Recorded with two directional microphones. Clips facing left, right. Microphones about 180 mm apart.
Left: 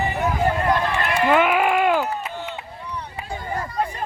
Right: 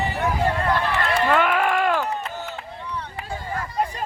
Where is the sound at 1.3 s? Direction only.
5° left (ahead or behind).